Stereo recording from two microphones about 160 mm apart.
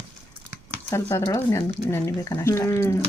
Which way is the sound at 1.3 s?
15° left (ahead or behind).